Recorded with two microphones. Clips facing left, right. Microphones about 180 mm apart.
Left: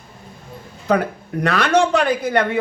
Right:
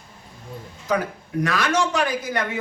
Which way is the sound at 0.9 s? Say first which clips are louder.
Left 5 dB; 60° left (ahead or behind).